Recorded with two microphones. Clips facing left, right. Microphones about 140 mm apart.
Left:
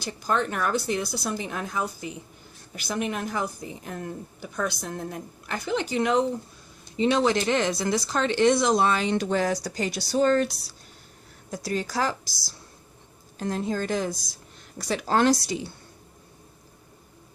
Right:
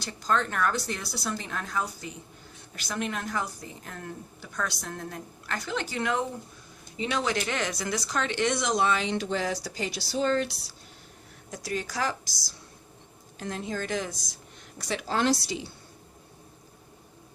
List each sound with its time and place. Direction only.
0.0 s a woman's voice: 15° left (ahead or behind)
6.9 s speech: 30° left (ahead or behind)
11.5 s speech: 35° left (ahead or behind)
13.4 s a woman's voice: 35° left (ahead or behind)